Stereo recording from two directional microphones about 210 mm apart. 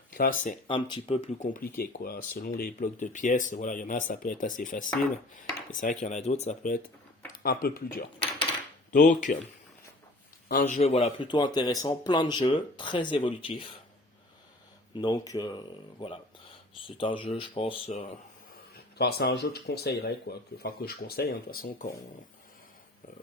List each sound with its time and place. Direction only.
0.1 s speech: 45° left (ahead or behind)
0.7 s speech: 25° left (ahead or behind); by 8.0 s 45° left (ahead or behind)
9.0 s speech: 35° left (ahead or behind)
10.5 s speech: 40° left (ahead or behind); by 13.7 s 25° left (ahead or behind)
15.0 s speech: 15° left (ahead or behind)
18.9 s speech: 50° left (ahead or behind)